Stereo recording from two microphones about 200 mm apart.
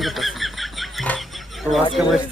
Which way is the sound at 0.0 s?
Centre (ahead or behind).